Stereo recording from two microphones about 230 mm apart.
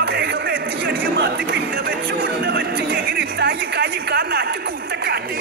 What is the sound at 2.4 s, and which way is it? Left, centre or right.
Music, right.